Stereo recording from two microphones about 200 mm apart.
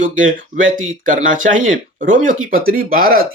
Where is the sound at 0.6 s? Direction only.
80° right.